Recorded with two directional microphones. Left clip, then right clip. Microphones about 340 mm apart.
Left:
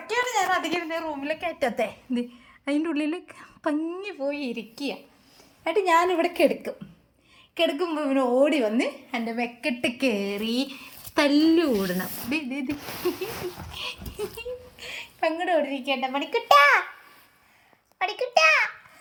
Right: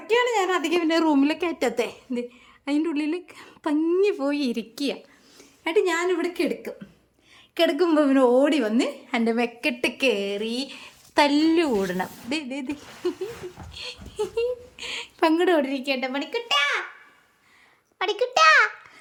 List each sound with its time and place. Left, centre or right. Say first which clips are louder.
0.1 s a woman's voice: right 3 dB; centre
7.5 s a woman's voice: right 5 dB; centre
8.4 s a woman's voice: right 1 dB; centre
11.6 s speech: right 1 dB; right
12.3 s a woman's voice: left 4 dB; centre
14.8 s a woman's voice: right 4 dB; centre
18.0 s a woman's voice: right 2 dB; centre